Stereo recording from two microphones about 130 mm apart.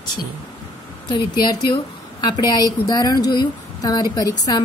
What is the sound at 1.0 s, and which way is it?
A woman's voice, 35° left (ahead or behind).